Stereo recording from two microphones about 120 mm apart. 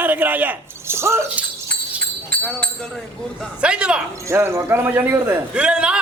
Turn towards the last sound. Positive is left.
turn(degrees=-10)  # may be behind; listen again after turning